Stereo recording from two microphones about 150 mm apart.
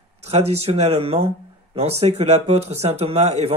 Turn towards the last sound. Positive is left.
turn(degrees=-45)  # may be behind; listen again after turning